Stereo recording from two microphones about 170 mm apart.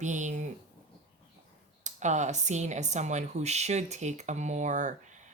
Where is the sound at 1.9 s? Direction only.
45° right (ahead or behind).